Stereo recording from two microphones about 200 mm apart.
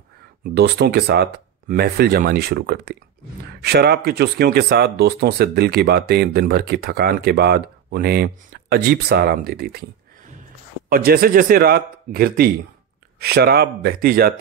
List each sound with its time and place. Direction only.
0.4 s speech: 55° right (ahead or behind)
10.9 s speech: 50° right (ahead or behind)